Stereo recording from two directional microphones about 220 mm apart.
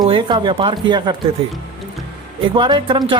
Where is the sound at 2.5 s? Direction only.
20° right (ahead or behind).